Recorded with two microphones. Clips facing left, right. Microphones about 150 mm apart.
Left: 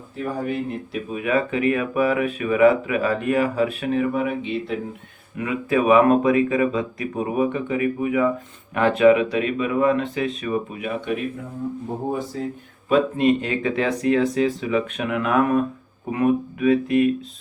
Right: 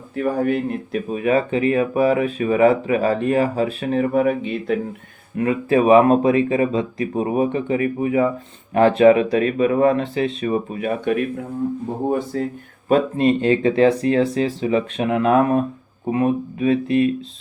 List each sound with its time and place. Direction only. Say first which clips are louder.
0.2 s speech: right 6 dB; 60° right (ahead or behind)
1.1 s speech: right 3 dB; 35° right (ahead or behind)
5.4 s speech: right 4 dB; 35° right (ahead or behind)
12.1 s speech: right 5 dB; 60° right (ahead or behind)
12.9 s speech: right 1 dB; 35° right (ahead or behind)